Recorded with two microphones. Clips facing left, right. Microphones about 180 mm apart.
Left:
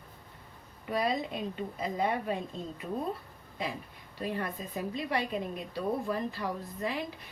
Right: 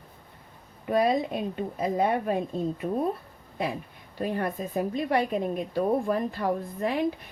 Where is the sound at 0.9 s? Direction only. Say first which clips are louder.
Right 7 dB; 50° right (ahead or behind).